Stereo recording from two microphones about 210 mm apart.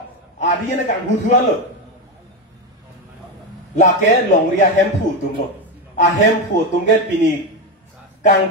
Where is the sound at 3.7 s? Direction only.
35° left (ahead or behind).